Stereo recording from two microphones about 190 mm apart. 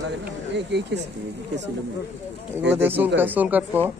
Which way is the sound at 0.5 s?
65° right (ahead or behind).